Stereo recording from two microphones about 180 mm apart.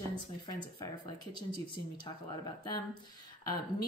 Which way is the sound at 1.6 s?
20° left (ahead or behind).